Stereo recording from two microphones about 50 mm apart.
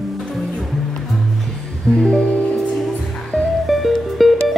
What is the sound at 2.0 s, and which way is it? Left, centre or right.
Music, centre.